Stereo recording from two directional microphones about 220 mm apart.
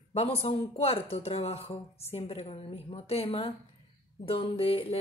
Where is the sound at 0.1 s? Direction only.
30° left (ahead or behind).